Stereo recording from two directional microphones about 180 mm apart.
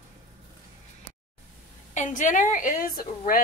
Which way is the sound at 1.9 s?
40° left (ahead or behind).